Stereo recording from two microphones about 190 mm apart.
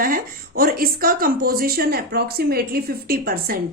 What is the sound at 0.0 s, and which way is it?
A woman's voice, 50° right (ahead or behind).